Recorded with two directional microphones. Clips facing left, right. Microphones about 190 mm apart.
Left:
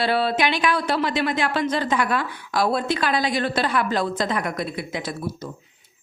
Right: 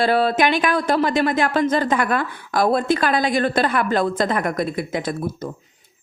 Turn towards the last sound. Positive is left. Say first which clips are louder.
# right 4 dB
turn(degrees=-50)  # may be behind; listen again after turning